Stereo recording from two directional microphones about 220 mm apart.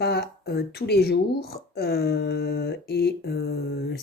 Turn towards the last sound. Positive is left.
turn(degrees=45)  # may be behind; listen again after turning